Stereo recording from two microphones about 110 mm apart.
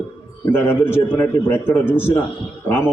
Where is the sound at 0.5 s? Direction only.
20° left (ahead or behind).